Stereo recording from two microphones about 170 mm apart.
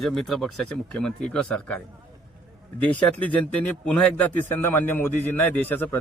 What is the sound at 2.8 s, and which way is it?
Speech, 10° left (ahead or behind).